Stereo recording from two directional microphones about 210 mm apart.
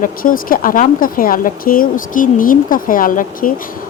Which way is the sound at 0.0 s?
40° left (ahead or behind).